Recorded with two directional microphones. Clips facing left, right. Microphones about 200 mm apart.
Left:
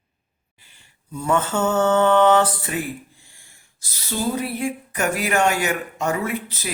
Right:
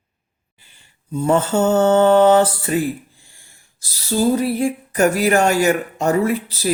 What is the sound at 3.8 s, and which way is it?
Speech, 35° right (ahead or behind).